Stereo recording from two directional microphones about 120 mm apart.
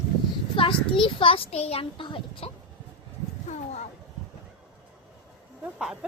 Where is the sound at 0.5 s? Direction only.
45° left (ahead or behind).